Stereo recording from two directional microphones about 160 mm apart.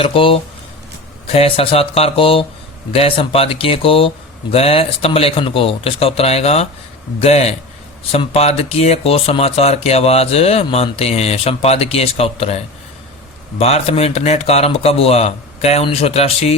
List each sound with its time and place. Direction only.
0.0 s speech: 35° left (ahead or behind)